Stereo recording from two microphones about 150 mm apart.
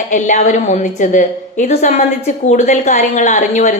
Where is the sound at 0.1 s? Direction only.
55° left (ahead or behind).